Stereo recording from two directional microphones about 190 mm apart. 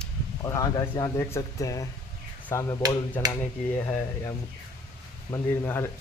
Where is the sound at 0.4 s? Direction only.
20° left (ahead or behind).